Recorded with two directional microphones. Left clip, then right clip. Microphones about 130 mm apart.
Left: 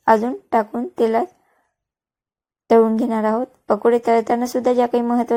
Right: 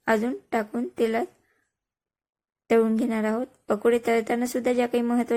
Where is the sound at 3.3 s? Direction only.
Centre (ahead or behind).